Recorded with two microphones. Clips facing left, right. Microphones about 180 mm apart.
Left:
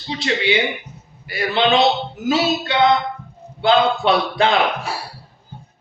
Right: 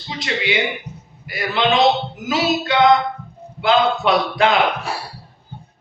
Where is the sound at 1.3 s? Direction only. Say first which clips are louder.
Left 2 dB; 30° left (ahead or behind).